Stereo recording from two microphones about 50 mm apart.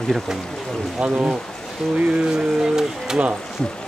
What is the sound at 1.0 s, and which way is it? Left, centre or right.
Speech, centre.